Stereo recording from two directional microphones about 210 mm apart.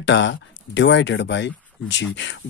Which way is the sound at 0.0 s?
60° left (ahead or behind).